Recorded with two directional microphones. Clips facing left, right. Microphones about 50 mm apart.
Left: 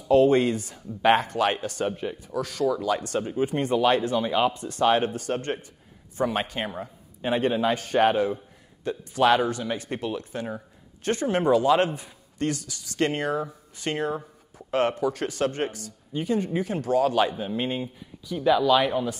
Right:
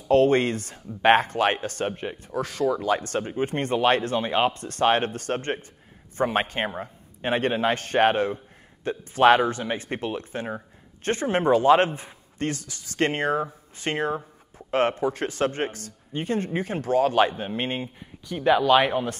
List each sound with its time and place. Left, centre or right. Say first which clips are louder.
0.1 s speech: even; right
3.4 s speech: even; right
8.8 s speech: right 4 dB; right